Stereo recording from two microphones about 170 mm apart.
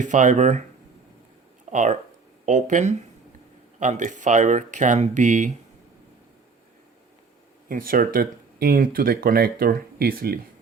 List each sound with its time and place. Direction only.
0.0 s speech: 45° right (ahead or behind)
1.7 s speech: 45° right (ahead or behind)
7.7 s speech: 55° right (ahead or behind)